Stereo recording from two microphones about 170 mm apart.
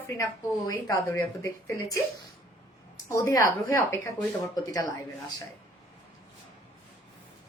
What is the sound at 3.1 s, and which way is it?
Speech, 20° left (ahead or behind).